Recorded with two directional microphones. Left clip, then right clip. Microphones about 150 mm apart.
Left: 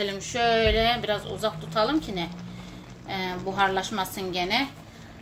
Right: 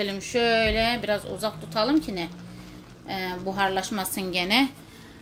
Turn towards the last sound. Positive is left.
turn(degrees=-60)  # may be behind; listen again after turning